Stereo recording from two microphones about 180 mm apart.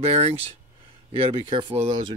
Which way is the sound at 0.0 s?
35° right (ahead or behind).